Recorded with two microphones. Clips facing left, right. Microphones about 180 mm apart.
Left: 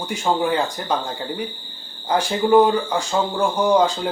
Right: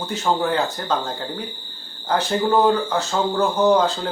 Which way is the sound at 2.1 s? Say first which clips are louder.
Left 3 dB; 10° left (ahead or behind).